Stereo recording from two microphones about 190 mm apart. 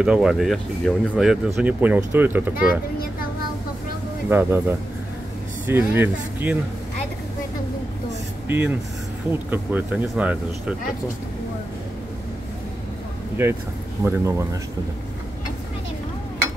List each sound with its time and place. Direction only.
0.0 s speech: 5° right (ahead or behind)
4.3 s speech: 10° right (ahead or behind)
8.5 s speech: 10° right (ahead or behind)
13.4 s speech: 10° right (ahead or behind)